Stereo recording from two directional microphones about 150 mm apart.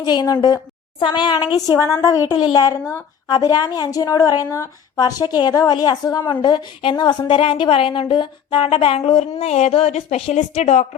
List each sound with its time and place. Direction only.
0.0 s a woman's voice: 30° left (ahead or behind); by 10.8 s 50° left (ahead or behind)